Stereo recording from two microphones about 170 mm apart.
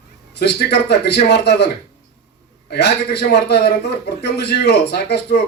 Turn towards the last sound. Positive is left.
turn(degrees=75)  # may be behind; listen again after turning